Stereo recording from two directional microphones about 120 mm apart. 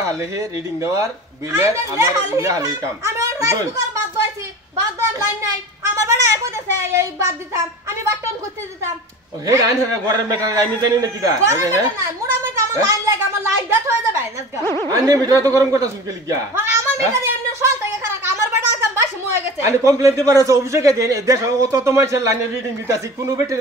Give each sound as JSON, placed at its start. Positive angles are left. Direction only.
{"t": 0.0, "sound": "speech", "side_deg": -30}
{"t": 5.2, "sound": "a sound", "side_deg": -20}
{"t": 6.8, "sound": "speech", "side_deg": -25}
{"t": 9.5, "sound": "speech", "side_deg": -30}
{"t": 12.5, "sound": "cat", "side_deg": -25}
{"t": 13.4, "sound": "a woman's voice", "side_deg": -20}